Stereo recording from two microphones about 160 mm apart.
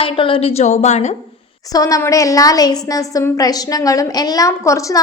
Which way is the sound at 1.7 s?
20° left (ahead or behind).